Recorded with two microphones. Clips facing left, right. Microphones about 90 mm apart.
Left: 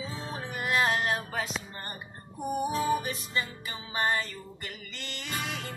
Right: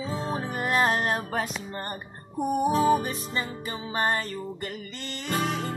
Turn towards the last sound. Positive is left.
turn(degrees=-40)  # may be behind; listen again after turning